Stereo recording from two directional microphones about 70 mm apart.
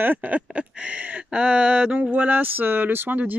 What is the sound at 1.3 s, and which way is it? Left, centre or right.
Speech, centre.